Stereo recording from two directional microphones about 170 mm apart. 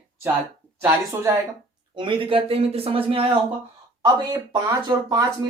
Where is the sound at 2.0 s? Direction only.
30° right (ahead or behind).